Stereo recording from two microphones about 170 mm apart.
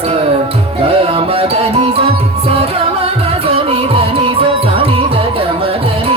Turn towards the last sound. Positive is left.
turn(degrees=-35)  # may be behind; listen again after turning